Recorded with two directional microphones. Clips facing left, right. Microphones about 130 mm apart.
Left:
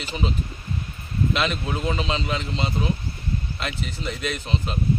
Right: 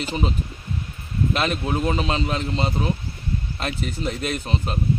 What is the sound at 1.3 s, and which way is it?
A man's voice, 45° right (ahead or behind).